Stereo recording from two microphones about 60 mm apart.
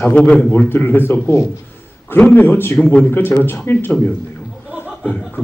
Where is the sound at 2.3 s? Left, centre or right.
Left.